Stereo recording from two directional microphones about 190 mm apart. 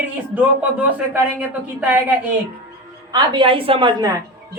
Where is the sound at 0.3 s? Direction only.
10° right (ahead or behind).